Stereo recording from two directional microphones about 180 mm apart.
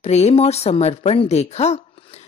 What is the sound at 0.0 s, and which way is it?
A woman's voice, 35° left (ahead or behind).